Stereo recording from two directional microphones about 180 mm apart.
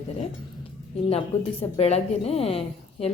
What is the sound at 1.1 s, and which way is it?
A woman's voice, 35° left (ahead or behind).